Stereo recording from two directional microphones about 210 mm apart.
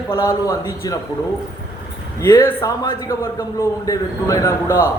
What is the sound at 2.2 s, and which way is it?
A man's voice, 10° left (ahead or behind).